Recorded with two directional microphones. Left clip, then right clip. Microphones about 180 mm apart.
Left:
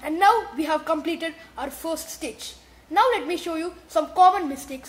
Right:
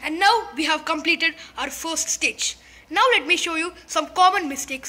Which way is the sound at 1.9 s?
20° left (ahead or behind).